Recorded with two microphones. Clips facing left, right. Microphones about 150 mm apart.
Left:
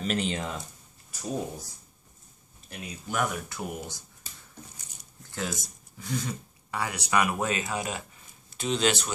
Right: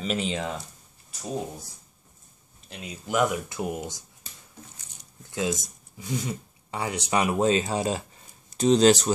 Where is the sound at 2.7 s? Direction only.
20° right (ahead or behind).